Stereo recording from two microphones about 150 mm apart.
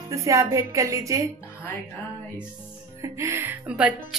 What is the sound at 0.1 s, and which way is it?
Speech, 20° right (ahead or behind).